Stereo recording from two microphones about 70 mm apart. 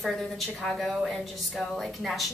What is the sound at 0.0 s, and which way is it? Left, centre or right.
A woman's voice, centre.